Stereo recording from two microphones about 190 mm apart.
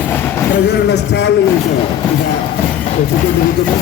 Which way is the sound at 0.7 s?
65° left (ahead or behind).